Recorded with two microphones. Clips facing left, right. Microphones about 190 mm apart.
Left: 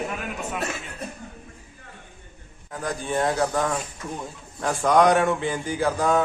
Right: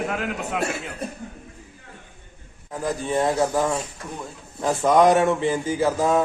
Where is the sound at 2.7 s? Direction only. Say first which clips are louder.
Right 3 dB; centre (ahead or behind).